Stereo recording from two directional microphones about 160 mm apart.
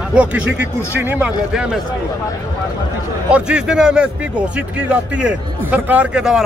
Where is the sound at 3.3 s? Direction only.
5° right (ahead or behind).